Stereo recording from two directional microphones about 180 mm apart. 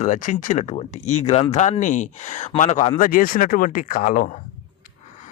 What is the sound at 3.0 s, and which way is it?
Speech, 50° left (ahead or behind).